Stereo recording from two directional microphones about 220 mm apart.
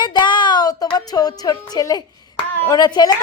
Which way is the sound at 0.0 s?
20° left (ahead or behind).